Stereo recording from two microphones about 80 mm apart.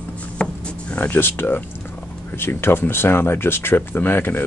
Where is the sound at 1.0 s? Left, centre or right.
Left.